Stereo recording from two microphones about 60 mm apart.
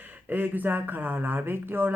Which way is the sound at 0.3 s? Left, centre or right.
Right.